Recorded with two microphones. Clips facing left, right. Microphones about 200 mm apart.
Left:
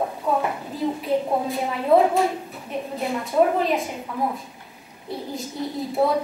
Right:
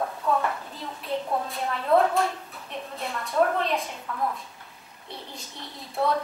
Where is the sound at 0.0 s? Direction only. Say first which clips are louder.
Left 3 dB; 20° left (ahead or behind).